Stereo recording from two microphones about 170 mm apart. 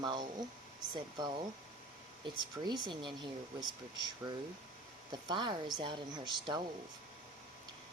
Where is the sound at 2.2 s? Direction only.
25° right (ahead or behind).